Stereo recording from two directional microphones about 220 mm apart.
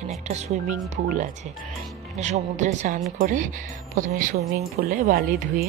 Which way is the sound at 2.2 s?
30° right (ahead or behind).